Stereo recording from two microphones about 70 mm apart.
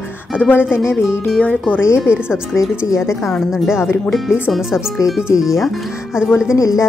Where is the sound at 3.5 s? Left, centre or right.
Centre.